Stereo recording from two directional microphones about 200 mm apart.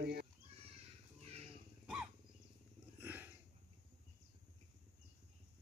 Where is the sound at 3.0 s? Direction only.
10° right (ahead or behind).